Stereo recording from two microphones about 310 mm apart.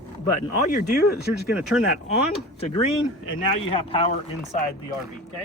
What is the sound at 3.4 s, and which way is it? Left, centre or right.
Speech, centre.